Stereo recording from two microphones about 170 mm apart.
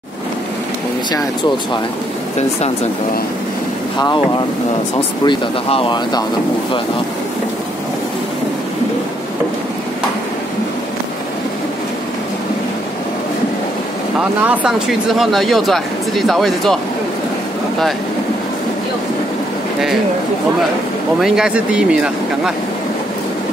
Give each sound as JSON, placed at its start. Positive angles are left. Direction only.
{"t": 5.2, "sound": "speech", "side_deg": 30}
{"t": 14.4, "sound": "speech", "side_deg": -5}
{"t": 21.2, "sound": "speech", "side_deg": -5}